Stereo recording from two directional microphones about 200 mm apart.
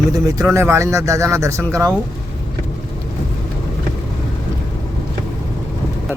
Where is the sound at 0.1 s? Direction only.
15° right (ahead or behind).